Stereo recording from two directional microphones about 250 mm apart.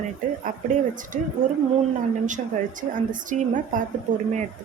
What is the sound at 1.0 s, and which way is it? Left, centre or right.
Speech, right.